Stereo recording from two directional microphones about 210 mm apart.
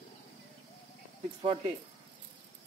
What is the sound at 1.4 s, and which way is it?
Speech, 25° right (ahead or behind).